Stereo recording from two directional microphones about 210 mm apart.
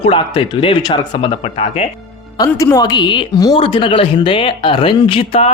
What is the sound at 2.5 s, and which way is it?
Speech, 10° left (ahead or behind).